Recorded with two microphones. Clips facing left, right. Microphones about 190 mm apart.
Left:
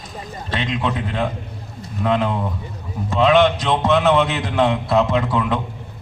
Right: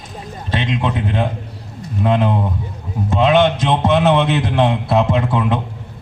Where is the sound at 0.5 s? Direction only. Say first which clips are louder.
Right 3 dB; 20° right (ahead or behind).